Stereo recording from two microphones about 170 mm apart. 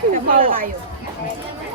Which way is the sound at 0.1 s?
55° right (ahead or behind).